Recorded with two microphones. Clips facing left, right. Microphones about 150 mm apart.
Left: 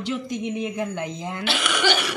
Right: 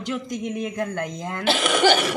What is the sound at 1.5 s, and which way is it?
Speech, 40° right (ahead or behind).